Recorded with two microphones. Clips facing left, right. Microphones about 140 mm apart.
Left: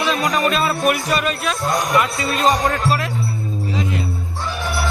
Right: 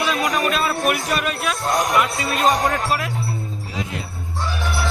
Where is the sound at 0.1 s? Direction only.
Centre (ahead or behind).